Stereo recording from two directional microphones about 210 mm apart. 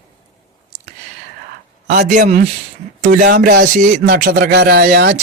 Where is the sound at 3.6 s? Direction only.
35° right (ahead or behind).